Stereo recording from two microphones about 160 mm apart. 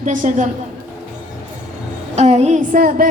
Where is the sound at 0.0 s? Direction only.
50° right (ahead or behind).